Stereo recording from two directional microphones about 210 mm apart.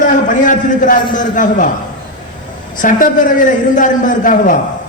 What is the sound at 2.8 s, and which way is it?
A man's voice, 40° left (ahead or behind).